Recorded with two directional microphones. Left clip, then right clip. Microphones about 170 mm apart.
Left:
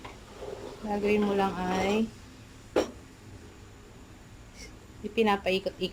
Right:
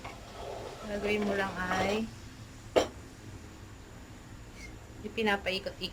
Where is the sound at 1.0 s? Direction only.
25° left (ahead or behind).